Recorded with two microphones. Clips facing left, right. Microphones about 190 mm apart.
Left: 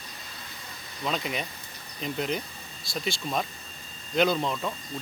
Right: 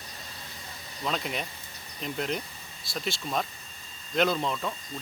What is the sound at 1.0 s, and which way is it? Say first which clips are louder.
Speech: left 1 dB; centre (ahead or behind).